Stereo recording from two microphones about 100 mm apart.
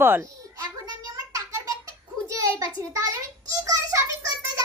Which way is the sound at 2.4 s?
35° right (ahead or behind).